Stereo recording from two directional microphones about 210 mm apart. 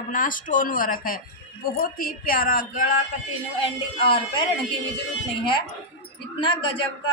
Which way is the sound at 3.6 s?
25° left (ahead or behind).